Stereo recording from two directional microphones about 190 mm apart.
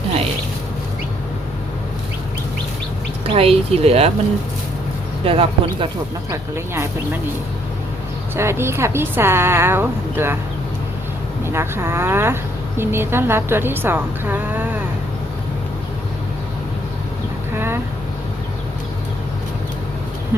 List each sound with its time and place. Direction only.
3.2 s speech: 30° right (ahead or behind)
5.2 s speech: 30° right (ahead or behind)
8.4 s speech: 15° right (ahead or behind)
11.4 s speech: 15° right (ahead or behind)